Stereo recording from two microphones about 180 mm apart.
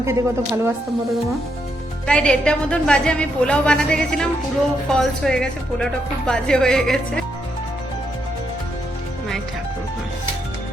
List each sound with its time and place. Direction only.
0.0 s speech: 15° right (ahead or behind)
2.0 s speech: 5° left (ahead or behind)